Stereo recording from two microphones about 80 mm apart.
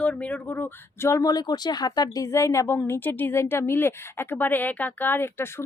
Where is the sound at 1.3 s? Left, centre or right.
Left.